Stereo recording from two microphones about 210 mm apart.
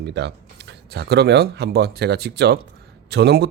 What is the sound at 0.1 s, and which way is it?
Speech, 55° right (ahead or behind).